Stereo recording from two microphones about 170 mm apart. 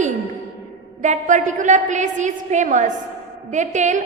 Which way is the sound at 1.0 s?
45° right (ahead or behind).